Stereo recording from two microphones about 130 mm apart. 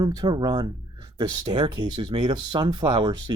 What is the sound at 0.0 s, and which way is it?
Speech, 30° right (ahead or behind).